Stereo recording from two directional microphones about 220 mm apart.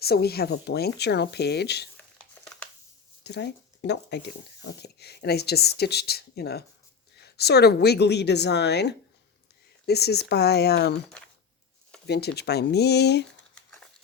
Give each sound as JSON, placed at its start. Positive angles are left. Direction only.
{"t": 0.0, "sound": "speech", "side_deg": 45}
{"t": 2.1, "sound": "a sound", "side_deg": 5}
{"t": 3.2, "sound": "speech", "side_deg": 50}
{"t": 12.0, "sound": "speech", "side_deg": 50}